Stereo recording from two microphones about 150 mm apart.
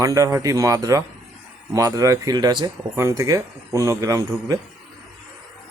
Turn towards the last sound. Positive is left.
turn(degrees=-25)  # may be behind; listen again after turning